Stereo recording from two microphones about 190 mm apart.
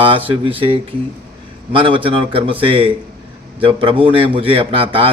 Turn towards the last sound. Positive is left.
turn(degrees=-30)  # may be behind; listen again after turning